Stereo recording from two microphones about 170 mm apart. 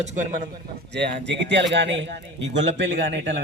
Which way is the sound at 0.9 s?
85° right.